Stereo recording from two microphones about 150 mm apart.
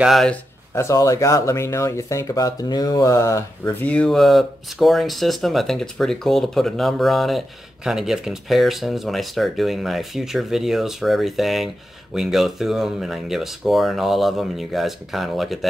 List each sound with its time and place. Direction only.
0.0 s speech: centre (ahead or behind)
0.7 s speech: 20° left (ahead or behind)
3.8 s speech: 10° left (ahead or behind)